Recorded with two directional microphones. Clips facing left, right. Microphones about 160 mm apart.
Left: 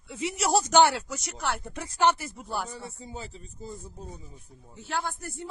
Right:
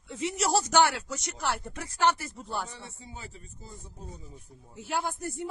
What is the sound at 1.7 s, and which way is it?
Speech, 20° left (ahead or behind).